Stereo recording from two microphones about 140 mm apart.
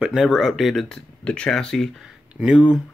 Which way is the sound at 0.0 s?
Centre (ahead or behind).